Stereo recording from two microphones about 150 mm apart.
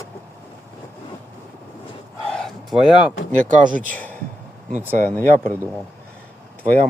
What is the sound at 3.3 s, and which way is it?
Speech, 60° right (ahead or behind).